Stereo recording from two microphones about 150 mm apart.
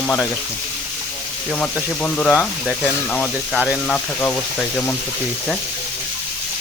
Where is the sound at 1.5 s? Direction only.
10° left (ahead or behind).